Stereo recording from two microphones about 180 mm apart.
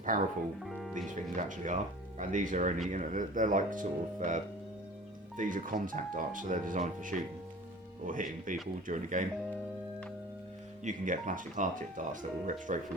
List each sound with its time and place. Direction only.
0.1 s speech: 45° right (ahead or behind)
0.6 s speech: centre (ahead or behind)
1.0 s speech: 45° right (ahead or behind)
10.8 s speech: 45° right (ahead or behind)